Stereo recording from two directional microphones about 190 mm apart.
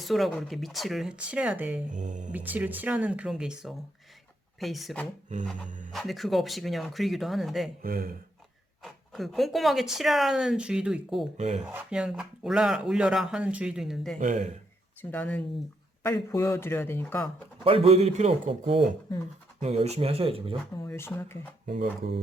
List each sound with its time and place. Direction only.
0.0 s speech: centre (ahead or behind)
1.9 s a man's voice: 40° right (ahead or behind)
2.3 s speech: 10° right (ahead or behind)
5.6 s speech: 40° right (ahead or behind)
5.9 s speech: centre (ahead or behind)
7.8 s speech: 50° right (ahead or behind)
8.8 s speech: centre (ahead or behind)
11.3 s a man's voice: 35° right (ahead or behind)
11.7 s speech: 5° right (ahead or behind)
14.2 s a man's voice: 40° right (ahead or behind)
15.1 s speech: 5° left (ahead or behind)
17.6 s a man's voice: 30° right (ahead or behind)
20.8 s speech: 10° left (ahead or behind)
21.7 s speech: 55° right (ahead or behind)